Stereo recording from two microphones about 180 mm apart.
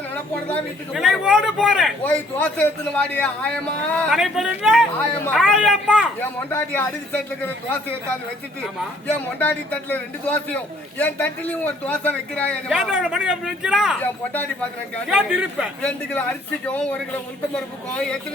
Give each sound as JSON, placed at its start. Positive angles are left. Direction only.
{"t": 0.1, "sound": "speech", "side_deg": 10}
{"t": 2.0, "sound": "speech", "side_deg": 10}
{"t": 6.1, "sound": "speech", "side_deg": 10}
{"t": 15.1, "sound": "speech", "side_deg": -5}
{"t": 15.8, "sound": "speech", "side_deg": 5}